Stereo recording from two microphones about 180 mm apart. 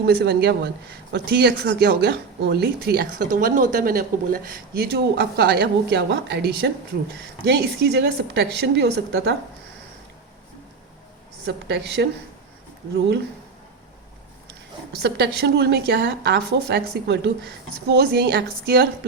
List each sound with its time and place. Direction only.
0.0 s a woman's voice: 65° right (ahead or behind)
3.3 s speech: 45° right (ahead or behind); by 9.3 s 65° right (ahead or behind)
11.4 s a woman's voice: 70° right (ahead or behind)
15.0 s a woman's voice: 65° right (ahead or behind)